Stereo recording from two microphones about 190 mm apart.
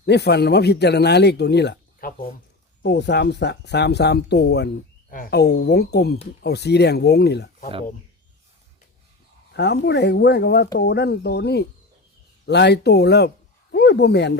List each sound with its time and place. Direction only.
0.0 s speech: 60° left (ahead or behind)
2.8 s speech: 60° left (ahead or behind)
9.5 s speech: 60° left (ahead or behind)